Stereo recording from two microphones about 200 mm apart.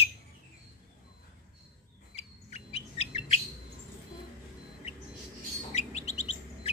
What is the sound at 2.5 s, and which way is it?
Chirp, 30° left (ahead or behind).